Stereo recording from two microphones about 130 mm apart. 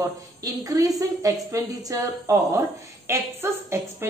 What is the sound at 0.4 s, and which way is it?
A woman's voice, 25° right (ahead or behind).